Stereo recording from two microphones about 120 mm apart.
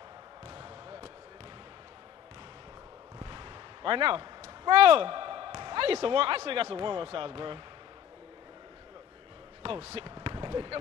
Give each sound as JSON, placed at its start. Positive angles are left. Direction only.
{"t": 0.5, "sound": "basketball bounce", "side_deg": -40}
{"t": 3.2, "sound": "speech", "side_deg": -40}
{"t": 9.6, "sound": "basketball bounce", "side_deg": -50}